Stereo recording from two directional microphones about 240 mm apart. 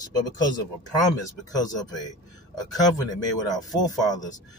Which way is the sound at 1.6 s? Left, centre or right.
Centre.